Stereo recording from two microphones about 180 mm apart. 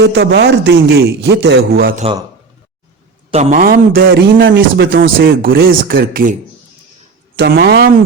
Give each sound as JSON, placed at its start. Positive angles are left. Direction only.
{"t": 0.0, "sound": "a man's voice", "side_deg": -70}
{"t": 3.3, "sound": "a man's voice", "side_deg": -40}
{"t": 7.3, "sound": "a man's voice", "side_deg": -65}